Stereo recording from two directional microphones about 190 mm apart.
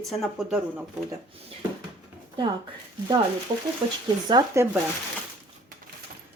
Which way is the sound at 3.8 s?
25° right (ahead or behind).